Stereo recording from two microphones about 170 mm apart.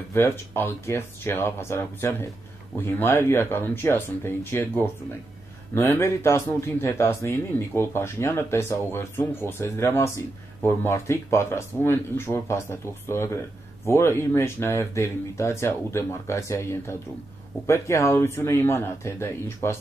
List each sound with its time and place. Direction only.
0.1 s a man's voice: 15° left (ahead or behind)